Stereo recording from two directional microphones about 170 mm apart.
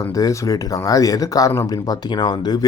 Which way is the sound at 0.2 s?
20° left (ahead or behind).